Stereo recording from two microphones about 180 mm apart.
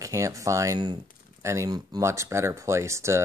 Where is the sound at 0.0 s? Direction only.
15° right (ahead or behind).